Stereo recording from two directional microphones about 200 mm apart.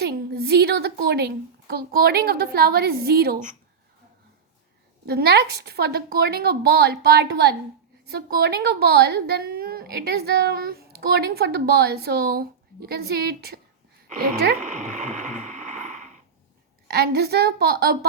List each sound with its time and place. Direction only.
0.0 s a woman's voice: 55° right (ahead or behind)
5.0 s a woman's voice: 55° right (ahead or behind)
14.6 s a sound: 35° right (ahead or behind)
16.9 s a woman's voice: 55° right (ahead or behind)